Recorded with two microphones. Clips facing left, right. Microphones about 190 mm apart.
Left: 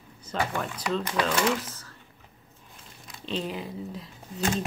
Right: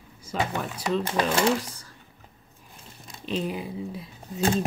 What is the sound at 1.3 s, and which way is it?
Speech, 30° right (ahead or behind).